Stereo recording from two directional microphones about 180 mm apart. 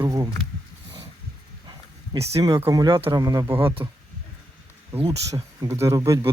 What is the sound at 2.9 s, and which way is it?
Speech, 30° right (ahead or behind).